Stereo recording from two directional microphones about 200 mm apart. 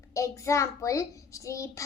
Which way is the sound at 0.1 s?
15° left (ahead or behind).